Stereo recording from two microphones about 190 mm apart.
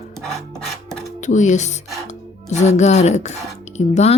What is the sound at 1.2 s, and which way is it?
Speech, 40° left (ahead or behind).